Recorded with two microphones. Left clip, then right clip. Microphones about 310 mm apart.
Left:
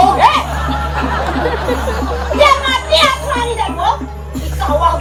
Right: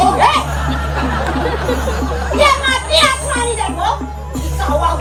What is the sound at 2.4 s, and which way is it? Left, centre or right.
Children playing, left.